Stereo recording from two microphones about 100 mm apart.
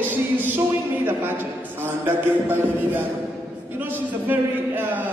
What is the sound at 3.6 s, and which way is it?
Speech, 20° right (ahead or behind).